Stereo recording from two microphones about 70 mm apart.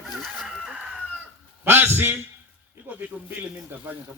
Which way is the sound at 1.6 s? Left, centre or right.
Right.